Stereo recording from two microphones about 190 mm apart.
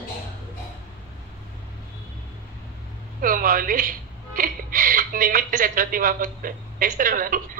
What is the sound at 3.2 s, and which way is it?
A woman's voice, 45° right (ahead or behind).